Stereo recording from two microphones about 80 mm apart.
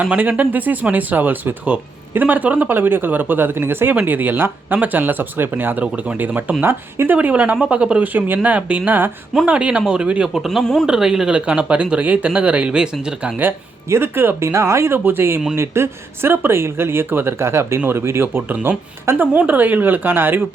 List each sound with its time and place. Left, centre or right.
0.0 s speech: centre
7.2 s speech: centre
10.4 s speech: centre
10.8 s speech: centre
13.9 s speech: right